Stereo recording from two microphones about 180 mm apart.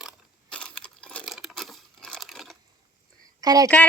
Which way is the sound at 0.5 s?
5° left (ahead or behind).